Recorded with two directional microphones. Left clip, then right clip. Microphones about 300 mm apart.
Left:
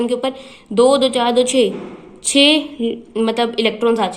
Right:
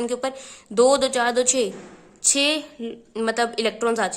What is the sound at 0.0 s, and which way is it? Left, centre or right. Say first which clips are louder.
A woman's voice: left 6 dB; right.